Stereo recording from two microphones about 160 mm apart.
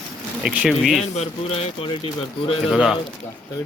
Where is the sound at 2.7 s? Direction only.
5° right (ahead or behind).